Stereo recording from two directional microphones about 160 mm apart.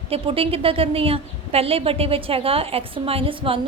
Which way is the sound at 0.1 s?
35° right (ahead or behind).